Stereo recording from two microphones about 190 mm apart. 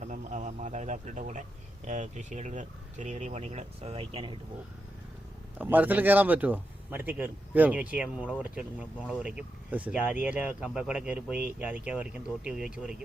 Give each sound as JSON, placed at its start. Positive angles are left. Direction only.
{"t": 0.0, "sound": "speech", "side_deg": -40}
{"t": 5.5, "sound": "a man's voice", "side_deg": -10}